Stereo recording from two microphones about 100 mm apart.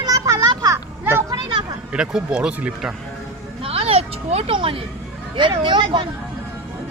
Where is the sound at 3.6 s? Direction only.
75° right (ahead or behind).